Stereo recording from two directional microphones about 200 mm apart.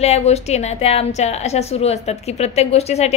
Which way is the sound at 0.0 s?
30° left (ahead or behind).